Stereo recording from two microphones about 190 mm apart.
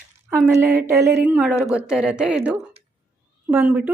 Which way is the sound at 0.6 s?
10° right (ahead or behind).